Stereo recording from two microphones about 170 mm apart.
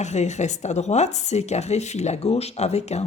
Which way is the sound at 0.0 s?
45° left (ahead or behind).